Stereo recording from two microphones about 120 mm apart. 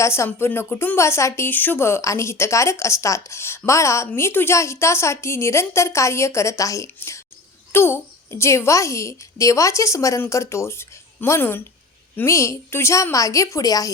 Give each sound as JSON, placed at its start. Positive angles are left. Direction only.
{"t": 0.0, "sound": "a woman's voice", "side_deg": 20}